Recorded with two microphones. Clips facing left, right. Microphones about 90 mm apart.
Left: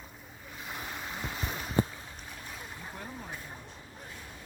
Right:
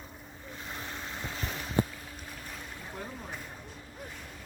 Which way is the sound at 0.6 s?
10° left (ahead or behind).